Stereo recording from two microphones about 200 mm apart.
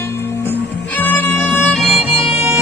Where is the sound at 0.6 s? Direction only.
60° left (ahead or behind).